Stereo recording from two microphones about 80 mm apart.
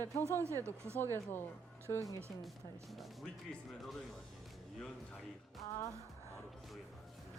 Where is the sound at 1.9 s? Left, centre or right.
Left.